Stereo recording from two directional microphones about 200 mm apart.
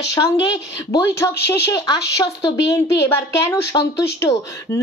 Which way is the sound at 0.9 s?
55° left (ahead or behind).